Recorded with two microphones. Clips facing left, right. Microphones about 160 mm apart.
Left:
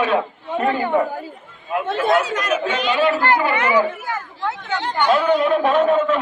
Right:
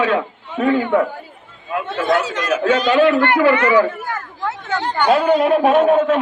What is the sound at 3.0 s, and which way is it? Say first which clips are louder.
Speech: right 4 dB; 60° right (ahead or behind).